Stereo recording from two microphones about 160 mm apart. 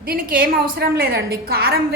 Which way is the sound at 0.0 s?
65° right (ahead or behind).